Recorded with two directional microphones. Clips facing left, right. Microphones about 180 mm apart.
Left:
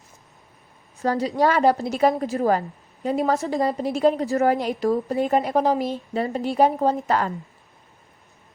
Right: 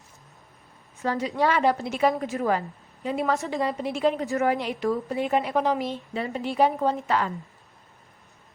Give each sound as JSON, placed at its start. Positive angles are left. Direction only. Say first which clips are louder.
{"t": 1.0, "sound": "a woman's voice", "louder": "left 4 dB", "side_deg": 35}